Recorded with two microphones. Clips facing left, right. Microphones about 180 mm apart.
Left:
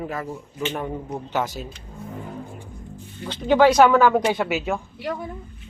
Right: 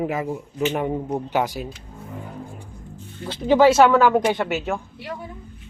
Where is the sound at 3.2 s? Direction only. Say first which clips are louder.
Right 1 dB; 5° right (ahead or behind).